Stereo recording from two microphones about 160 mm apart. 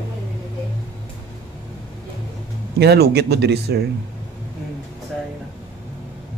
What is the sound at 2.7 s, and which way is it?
Speech, 90° right.